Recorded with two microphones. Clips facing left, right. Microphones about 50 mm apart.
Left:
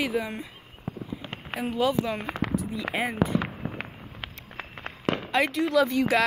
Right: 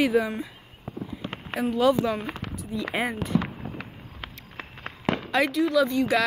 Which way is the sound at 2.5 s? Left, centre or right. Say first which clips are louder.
Left 2 dB; centre.